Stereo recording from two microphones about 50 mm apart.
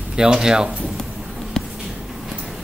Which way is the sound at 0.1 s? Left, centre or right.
Centre.